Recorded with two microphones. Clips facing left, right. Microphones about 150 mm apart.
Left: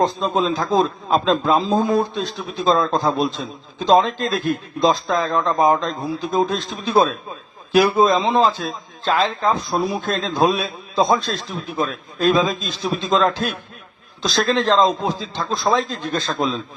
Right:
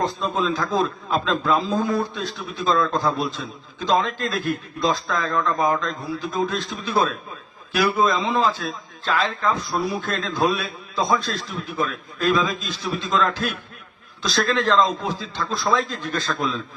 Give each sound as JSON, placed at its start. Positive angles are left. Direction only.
{"t": 0.0, "sound": "a man's voice", "side_deg": 25}